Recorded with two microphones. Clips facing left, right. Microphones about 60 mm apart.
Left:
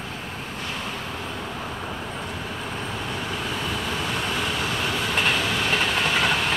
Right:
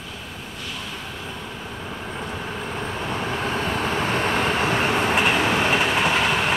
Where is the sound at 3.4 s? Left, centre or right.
Right.